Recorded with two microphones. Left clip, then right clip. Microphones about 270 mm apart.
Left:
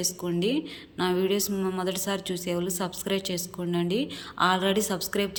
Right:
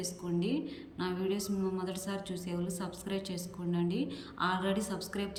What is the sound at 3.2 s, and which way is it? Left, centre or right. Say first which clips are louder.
A woman's voice: left 8 dB; centre.